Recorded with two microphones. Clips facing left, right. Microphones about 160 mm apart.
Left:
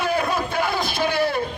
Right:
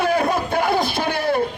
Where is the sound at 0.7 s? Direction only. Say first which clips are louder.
Right 1 dB; 45° right (ahead or behind).